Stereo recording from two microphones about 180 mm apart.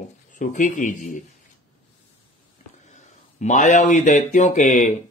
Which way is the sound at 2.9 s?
40° left (ahead or behind).